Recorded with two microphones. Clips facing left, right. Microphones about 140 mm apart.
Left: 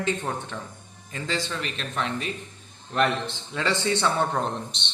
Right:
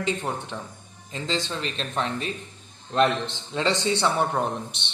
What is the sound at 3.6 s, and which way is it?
Speech, 20° right (ahead or behind).